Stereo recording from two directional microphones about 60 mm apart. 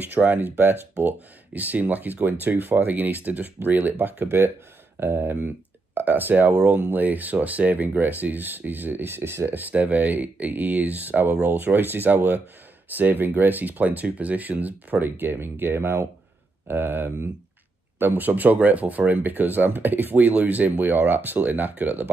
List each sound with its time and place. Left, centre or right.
0.0 s speech: right
9.5 s speech: right